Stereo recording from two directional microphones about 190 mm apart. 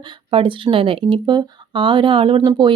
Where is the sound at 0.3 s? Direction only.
25° right (ahead or behind).